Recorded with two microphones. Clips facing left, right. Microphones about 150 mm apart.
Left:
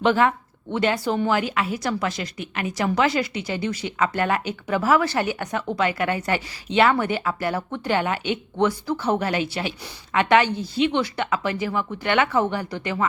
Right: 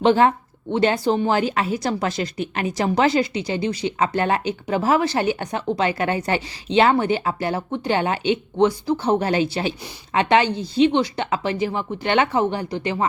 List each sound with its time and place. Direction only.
0.0 s a woman's voice: 30° right (ahead or behind)